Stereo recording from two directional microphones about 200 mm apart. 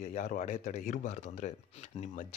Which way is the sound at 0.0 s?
40° left (ahead or behind).